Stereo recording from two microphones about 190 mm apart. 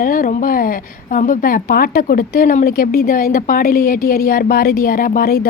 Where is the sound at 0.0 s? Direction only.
50° left (ahead or behind).